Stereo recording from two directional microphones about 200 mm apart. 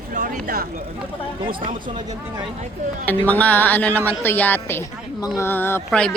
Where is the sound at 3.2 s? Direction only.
10° left (ahead or behind).